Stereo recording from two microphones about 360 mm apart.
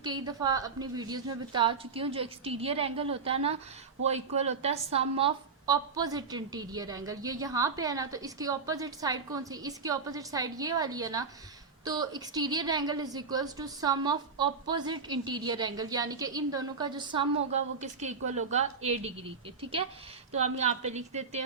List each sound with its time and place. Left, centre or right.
0.0 s a woman's voice: centre
20.3 s a woman's voice: centre